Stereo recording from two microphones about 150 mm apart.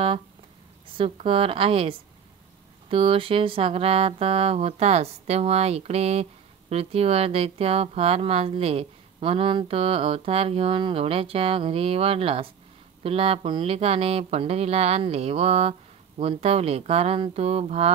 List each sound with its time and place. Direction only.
0.9 s speech: 40° right (ahead or behind)